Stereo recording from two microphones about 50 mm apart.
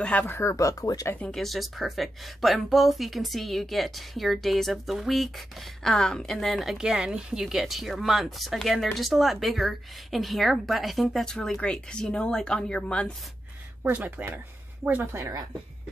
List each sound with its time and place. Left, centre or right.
0.3 s speech: left
1.3 s speech: centre
5.9 s speech: centre
6.7 s speech: centre
11.2 s speech: centre
13.9 s speech: right